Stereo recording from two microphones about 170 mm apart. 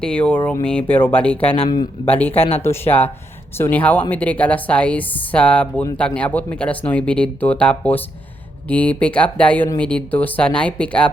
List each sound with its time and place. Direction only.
0.0 s speech: 5° left (ahead or behind)
1.5 s speech: 30° left (ahead or behind)
2.0 s speech: 10° left (ahead or behind)